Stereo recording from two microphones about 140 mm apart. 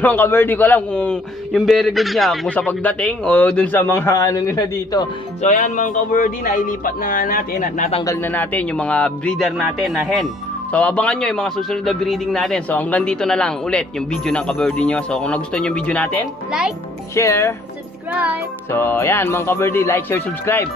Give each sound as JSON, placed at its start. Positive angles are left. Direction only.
{"t": 0.0, "sound": "a man's voice", "side_deg": 15}
{"t": 2.4, "sound": "a man's voice", "side_deg": 10}
{"t": 5.4, "sound": "speech", "side_deg": 60}
{"t": 8.0, "sound": "a man's voice", "side_deg": 20}
{"t": 10.7, "sound": "a man's voice", "side_deg": 10}
{"t": 17.1, "sound": "speech", "side_deg": 20}
{"t": 18.1, "sound": "music", "side_deg": -10}
{"t": 18.7, "sound": "a man's voice", "side_deg": 15}